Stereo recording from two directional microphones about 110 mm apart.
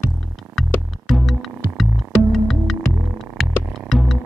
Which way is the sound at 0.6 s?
Centre (ahead or behind).